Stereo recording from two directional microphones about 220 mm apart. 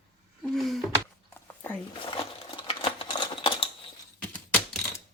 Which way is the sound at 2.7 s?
25° left (ahead or behind).